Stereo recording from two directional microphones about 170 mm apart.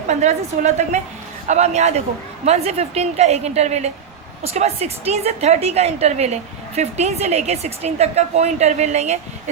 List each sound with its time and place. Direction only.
0.1 s a woman's voice: 40° right (ahead or behind)